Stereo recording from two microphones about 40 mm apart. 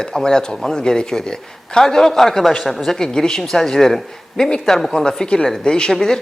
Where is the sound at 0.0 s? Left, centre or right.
Centre.